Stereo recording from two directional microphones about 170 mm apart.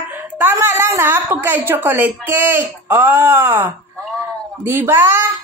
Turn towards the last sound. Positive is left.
turn(degrees=-15)  # may be behind; listen again after turning